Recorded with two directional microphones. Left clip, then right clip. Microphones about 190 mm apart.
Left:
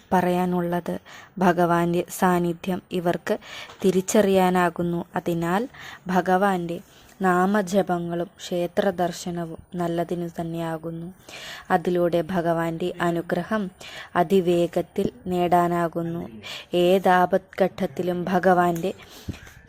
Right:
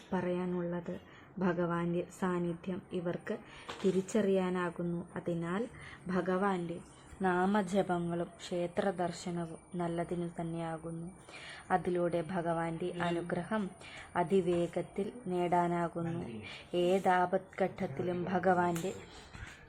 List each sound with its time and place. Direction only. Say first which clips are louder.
0.1 s a woman's voice: left 14 dB; 45° left (ahead or behind)